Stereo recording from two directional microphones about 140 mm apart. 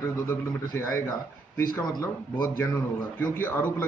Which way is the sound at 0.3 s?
20° left (ahead or behind).